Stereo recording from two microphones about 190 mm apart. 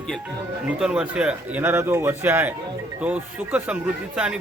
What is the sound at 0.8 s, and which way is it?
A man's voice, 5° right (ahead or behind).